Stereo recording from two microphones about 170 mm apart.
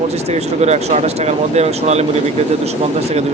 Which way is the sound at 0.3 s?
40° right (ahead or behind).